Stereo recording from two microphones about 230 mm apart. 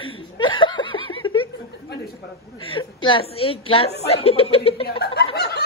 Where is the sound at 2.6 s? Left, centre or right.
Left.